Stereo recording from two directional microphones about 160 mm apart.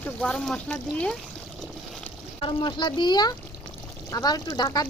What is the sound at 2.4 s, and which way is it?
Speech, 30° left (ahead or behind).